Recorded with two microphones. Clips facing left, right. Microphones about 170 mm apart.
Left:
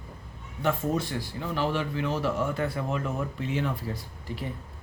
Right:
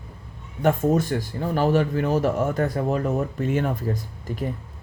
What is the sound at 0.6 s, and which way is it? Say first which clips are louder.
Speech: right 7 dB; 45° right (ahead or behind).